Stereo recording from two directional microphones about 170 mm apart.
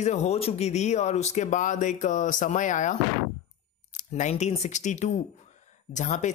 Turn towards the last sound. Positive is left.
turn(degrees=45)  # may be behind; listen again after turning